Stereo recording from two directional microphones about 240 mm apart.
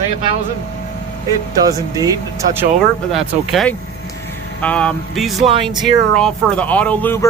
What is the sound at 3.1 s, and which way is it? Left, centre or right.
Speech, centre.